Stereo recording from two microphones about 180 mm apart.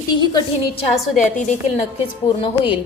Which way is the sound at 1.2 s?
45° left (ahead or behind).